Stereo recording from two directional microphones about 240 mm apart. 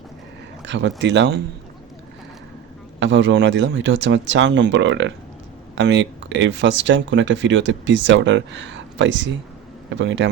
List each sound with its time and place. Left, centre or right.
0.6 s speech: right
3.0 s speech: right